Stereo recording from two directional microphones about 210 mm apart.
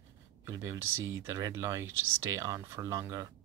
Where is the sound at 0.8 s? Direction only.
70° right (ahead or behind).